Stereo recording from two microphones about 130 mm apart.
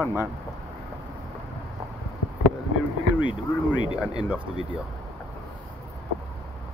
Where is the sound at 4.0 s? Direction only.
5° right (ahead or behind).